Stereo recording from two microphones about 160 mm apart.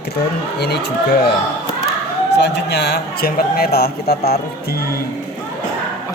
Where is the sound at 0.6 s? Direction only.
90° left.